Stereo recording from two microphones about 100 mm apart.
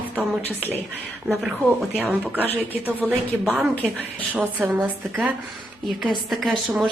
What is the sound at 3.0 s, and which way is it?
Speech, centre (ahead or behind).